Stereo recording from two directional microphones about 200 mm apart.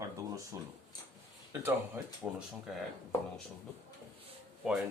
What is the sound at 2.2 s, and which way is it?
Speech, 5° right (ahead or behind).